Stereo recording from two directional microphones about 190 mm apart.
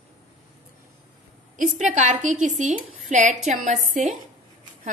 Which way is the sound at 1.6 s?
40° right (ahead or behind).